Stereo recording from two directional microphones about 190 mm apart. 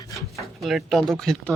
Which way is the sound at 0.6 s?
Centre (ahead or behind).